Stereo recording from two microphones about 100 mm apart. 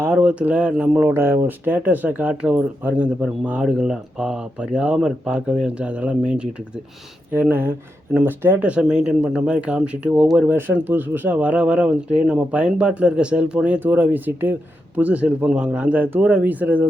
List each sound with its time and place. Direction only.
0.0 s speech: 20° right (ahead or behind)
1.0 s speech: 25° right (ahead or behind)